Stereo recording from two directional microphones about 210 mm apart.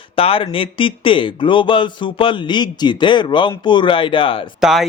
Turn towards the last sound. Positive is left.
turn(degrees=0)  # may be behind; listen again after turning